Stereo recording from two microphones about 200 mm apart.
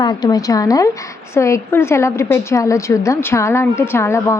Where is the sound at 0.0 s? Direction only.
20° left (ahead or behind).